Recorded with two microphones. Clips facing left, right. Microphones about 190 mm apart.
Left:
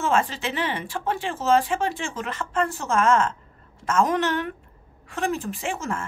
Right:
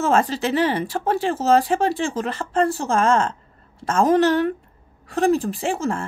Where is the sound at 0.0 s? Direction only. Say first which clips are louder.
Right 4 dB; 40° right (ahead or behind).